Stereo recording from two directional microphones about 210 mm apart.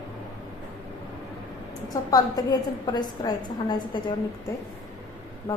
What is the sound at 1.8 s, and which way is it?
A woman's voice, 15° left (ahead or behind).